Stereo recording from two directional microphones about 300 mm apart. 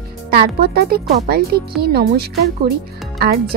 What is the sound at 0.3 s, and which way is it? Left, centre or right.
Speech, right.